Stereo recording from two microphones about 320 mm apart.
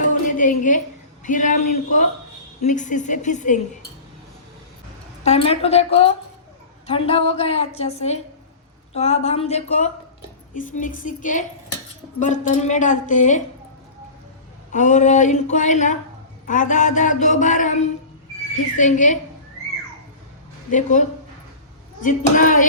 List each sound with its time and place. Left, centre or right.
0.1 s a sound: left
1.2 s a man's voice: left
5.2 s a man's voice: centre
14.7 s a man's voice: left
20.7 s a man's voice: left